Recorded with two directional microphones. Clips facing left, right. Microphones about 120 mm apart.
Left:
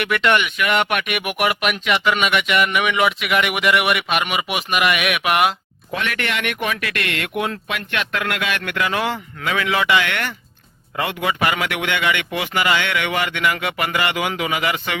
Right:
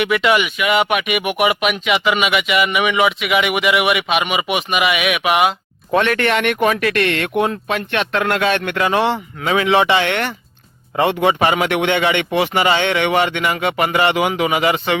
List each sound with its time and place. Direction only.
0.0 s speech: 5° right (ahead or behind)
5.9 s a man's voice: 35° right (ahead or behind)